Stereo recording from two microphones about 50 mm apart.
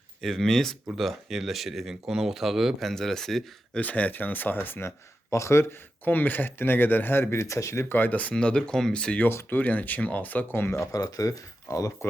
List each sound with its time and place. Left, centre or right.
0.2 s speech: centre
2.8 s speech: centre
3.8 s speech: left
4.9 s speech: left
6.1 s speech: left
7.3 s speech: left
7.9 s speech: left
8.1 s speech: left
8.4 s speech: centre
9.5 s speech: left
11.7 s speech: left